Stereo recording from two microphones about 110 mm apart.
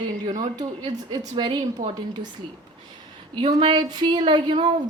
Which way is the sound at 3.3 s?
45° right (ahead or behind).